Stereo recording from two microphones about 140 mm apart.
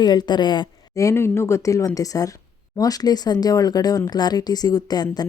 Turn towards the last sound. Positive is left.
turn(degrees=30)  # may be behind; listen again after turning